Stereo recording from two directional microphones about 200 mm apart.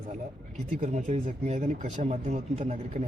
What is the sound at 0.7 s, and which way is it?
Speech, 40° right (ahead or behind).